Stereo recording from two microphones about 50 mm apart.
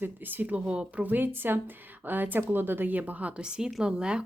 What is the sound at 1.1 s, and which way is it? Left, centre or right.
Speech, right.